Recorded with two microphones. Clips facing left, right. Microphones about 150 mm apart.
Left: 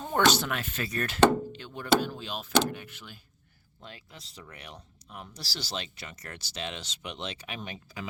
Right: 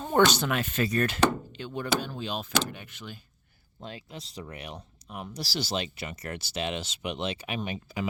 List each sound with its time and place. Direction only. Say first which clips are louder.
0.3 s speech: left 1 dB; centre (ahead or behind)
3.8 s speech: right 7 dB; 20° right (ahead or behind)